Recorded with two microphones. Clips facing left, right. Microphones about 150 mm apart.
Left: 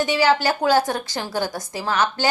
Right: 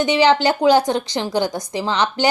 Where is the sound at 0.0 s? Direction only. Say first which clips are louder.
Right 3 dB; 20° right (ahead or behind).